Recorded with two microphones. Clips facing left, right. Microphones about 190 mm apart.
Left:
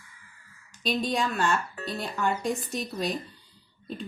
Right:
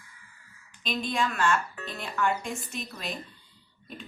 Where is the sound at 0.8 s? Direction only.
35° left (ahead or behind).